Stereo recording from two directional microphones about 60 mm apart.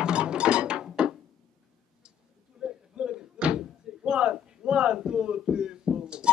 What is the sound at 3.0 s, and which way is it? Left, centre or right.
Slam, centre.